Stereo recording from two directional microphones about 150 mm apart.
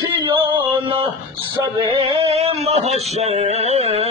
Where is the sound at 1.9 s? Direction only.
40° right (ahead or behind).